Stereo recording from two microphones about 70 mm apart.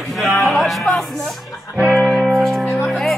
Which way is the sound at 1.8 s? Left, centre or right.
Centre.